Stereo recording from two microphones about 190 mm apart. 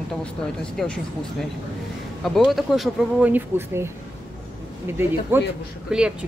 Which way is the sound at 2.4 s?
Centre (ahead or behind).